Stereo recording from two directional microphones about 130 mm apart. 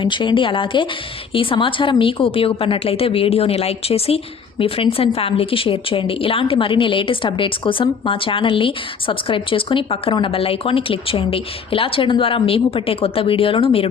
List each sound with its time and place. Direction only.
0.0 s a woman's voice: 35° left (ahead or behind)